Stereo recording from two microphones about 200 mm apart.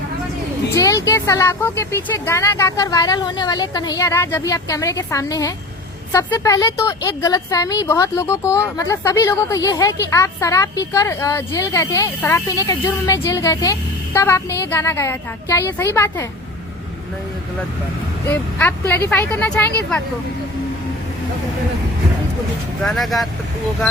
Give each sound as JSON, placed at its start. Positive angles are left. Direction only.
{"t": 0.7, "sound": "speech", "side_deg": 15}
{"t": 18.3, "sound": "speech", "side_deg": 10}
{"t": 22.8, "sound": "speech", "side_deg": 0}